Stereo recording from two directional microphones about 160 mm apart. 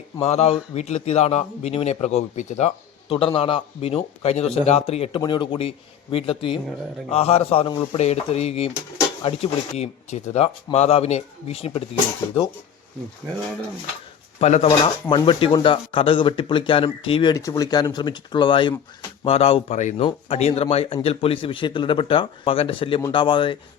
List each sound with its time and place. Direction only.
0.2 s a man's voice: 40° left (ahead or behind)
14.3 s speech: 40° left (ahead or behind)
15.1 s a man's voice: 30° left (ahead or behind); by 20.1 s 50° left (ahead or behind)
20.1 s a man's voice: 40° left (ahead or behind)